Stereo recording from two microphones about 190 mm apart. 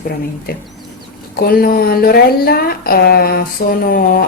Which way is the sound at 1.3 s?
50° left (ahead or behind).